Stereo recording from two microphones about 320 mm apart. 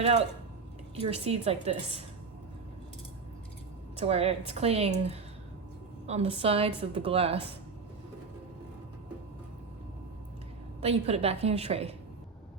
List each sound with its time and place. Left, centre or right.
0.0 s speech: right
4.0 s a woman's voice: centre
10.8 s speech: centre